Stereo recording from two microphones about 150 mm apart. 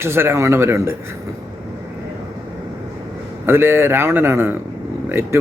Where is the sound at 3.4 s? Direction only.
15° right (ahead or behind).